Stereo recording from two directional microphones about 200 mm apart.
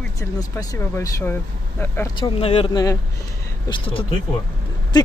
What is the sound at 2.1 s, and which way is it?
Speech, 25° left (ahead or behind).